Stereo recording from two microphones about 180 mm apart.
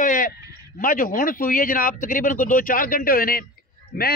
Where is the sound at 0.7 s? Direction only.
50° left (ahead or behind).